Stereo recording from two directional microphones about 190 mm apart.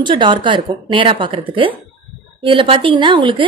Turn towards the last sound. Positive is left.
turn(degrees=-25)  # may be behind; listen again after turning